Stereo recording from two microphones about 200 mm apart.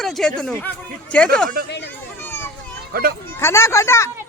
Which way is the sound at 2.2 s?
10° left (ahead or behind).